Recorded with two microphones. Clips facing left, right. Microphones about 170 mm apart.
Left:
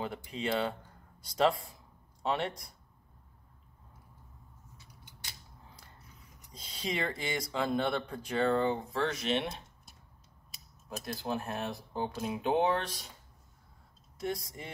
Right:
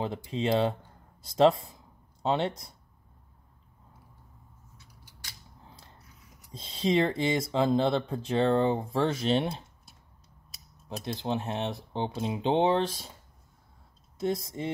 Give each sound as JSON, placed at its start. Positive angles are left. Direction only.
{"t": 0.0, "sound": "speech", "side_deg": -25}
{"t": 6.5, "sound": "speech", "side_deg": -25}
{"t": 10.9, "sound": "speech", "side_deg": -25}
{"t": 14.2, "sound": "speech", "side_deg": -25}